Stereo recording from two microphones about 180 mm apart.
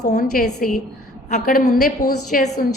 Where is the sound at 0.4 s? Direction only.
50° left (ahead or behind).